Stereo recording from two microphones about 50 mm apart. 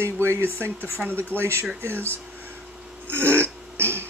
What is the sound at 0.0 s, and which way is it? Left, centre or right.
Speech, right.